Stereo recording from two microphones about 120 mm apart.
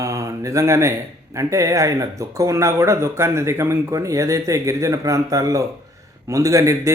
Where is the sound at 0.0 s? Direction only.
25° right (ahead or behind).